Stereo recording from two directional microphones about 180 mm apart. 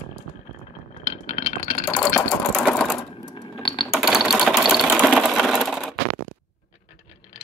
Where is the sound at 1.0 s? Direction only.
40° left (ahead or behind).